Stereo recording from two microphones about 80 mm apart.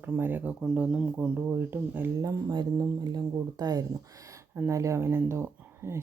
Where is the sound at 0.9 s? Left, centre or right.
Centre.